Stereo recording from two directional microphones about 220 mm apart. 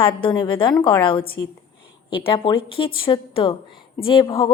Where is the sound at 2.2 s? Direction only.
25° left (ahead or behind).